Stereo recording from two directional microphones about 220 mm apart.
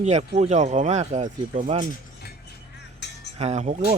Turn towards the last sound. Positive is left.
turn(degrees=-30)  # may be behind; listen again after turning